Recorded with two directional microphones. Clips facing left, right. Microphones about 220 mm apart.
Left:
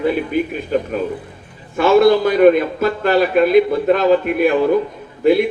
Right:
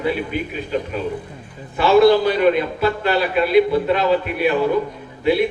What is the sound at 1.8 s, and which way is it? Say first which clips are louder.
A man's voice: left 1 dB; 45° left (ahead or behind).